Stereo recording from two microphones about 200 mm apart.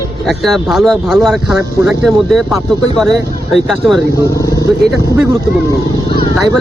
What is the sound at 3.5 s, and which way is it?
Speech, centre (ahead or behind).